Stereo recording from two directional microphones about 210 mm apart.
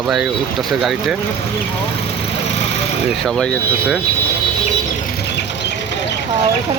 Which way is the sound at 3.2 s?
5° left (ahead or behind).